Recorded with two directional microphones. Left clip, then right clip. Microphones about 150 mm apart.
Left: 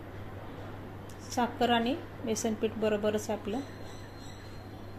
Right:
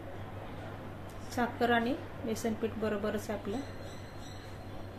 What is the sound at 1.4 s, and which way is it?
A woman's voice, 15° left (ahead or behind).